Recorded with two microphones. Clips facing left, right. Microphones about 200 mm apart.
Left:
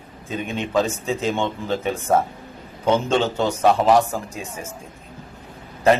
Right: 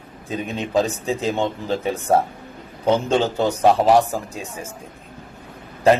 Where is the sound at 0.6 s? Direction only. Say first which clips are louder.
Right 1 dB; 35° right (ahead or behind).